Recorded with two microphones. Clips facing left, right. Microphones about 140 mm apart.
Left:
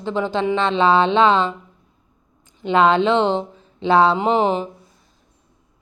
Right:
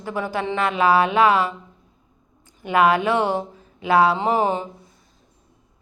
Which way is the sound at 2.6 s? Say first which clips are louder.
Left 2 dB; 25° left (ahead or behind).